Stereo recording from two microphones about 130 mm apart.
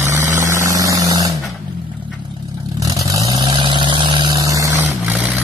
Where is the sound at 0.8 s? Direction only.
25° right (ahead or behind).